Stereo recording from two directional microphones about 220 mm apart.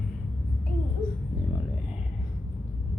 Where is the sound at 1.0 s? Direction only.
10° left (ahead or behind).